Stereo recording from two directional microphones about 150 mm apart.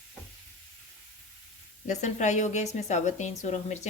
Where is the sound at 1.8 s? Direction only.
50° left (ahead or behind).